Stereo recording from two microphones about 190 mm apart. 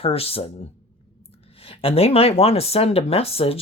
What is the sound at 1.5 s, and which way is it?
Speech, 30° left (ahead or behind).